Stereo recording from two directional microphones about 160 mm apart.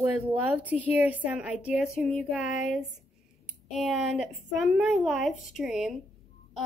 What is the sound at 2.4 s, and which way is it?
Speech, 50° left (ahead or behind).